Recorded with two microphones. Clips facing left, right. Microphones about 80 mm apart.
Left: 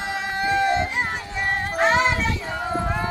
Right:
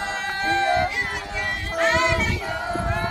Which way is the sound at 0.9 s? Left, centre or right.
Left.